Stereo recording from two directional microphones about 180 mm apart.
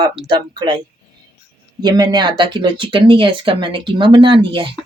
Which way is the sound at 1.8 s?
20° right (ahead or behind).